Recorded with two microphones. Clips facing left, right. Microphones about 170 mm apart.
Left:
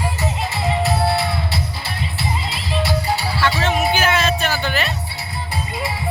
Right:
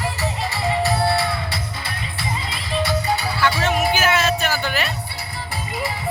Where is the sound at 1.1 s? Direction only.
25° left (ahead or behind).